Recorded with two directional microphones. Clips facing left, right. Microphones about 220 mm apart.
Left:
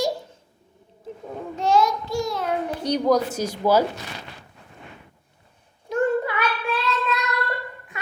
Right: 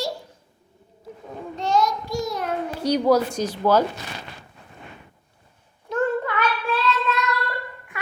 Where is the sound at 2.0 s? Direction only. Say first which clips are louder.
Left 1 dB; 20° right (ahead or behind).